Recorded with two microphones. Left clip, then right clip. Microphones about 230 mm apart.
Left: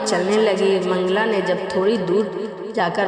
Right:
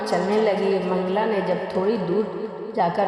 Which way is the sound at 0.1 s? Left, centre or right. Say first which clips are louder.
Left 2 dB; left.